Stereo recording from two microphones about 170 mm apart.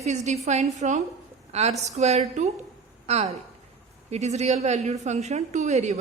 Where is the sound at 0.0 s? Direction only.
40° right (ahead or behind).